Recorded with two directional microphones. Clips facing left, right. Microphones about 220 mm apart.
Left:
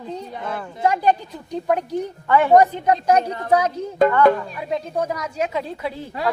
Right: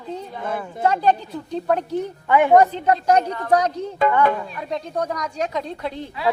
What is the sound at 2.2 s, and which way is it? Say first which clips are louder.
Speech: even; 15° right (ahead or behind).